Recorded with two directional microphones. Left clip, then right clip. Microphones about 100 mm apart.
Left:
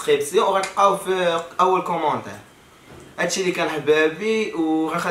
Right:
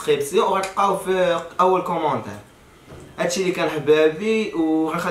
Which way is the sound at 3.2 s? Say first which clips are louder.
Even; centre (ahead or behind).